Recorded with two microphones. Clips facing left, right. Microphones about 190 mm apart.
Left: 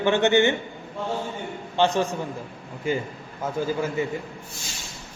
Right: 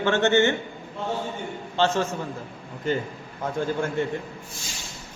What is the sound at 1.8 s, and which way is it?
A man's voice, 15° left (ahead or behind).